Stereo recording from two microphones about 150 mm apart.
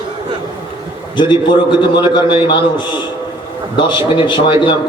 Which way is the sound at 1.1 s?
30° left (ahead or behind).